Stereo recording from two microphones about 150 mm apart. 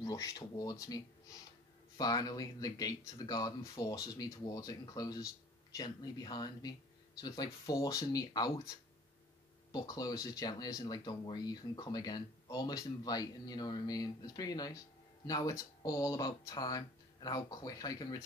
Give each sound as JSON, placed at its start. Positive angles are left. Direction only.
{"t": 0.0, "sound": "speech", "side_deg": 25}